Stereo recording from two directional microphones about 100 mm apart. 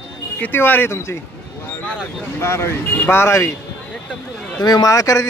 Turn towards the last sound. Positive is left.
turn(degrees=35)  # may be behind; listen again after turning